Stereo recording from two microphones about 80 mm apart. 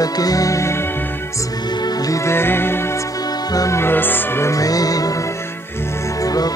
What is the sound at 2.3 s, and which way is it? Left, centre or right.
Music, left.